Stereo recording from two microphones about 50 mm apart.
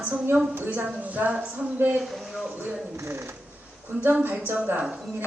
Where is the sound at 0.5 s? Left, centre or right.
Right.